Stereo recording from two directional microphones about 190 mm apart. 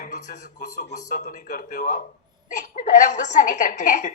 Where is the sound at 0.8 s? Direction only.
40° left (ahead or behind).